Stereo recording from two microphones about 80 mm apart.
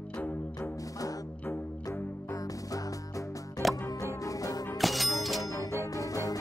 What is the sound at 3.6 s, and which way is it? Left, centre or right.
Music, centre.